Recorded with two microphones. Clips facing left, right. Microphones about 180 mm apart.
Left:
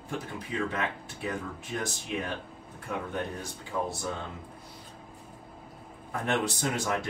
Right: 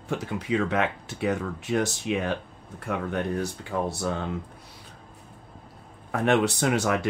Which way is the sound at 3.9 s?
75° right (ahead or behind).